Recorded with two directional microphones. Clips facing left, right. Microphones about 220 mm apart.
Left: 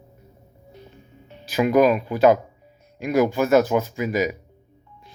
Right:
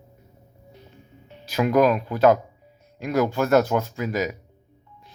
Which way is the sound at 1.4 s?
5° left (ahead or behind).